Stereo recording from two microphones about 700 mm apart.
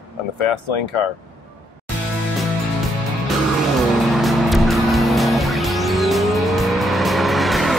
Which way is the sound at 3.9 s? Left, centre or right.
Centre.